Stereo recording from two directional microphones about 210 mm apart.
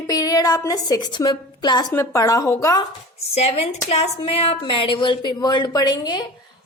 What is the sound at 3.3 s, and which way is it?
A woman's voice, 30° left (ahead or behind).